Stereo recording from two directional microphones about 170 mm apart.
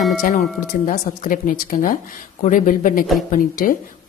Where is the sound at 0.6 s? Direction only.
45° left (ahead or behind).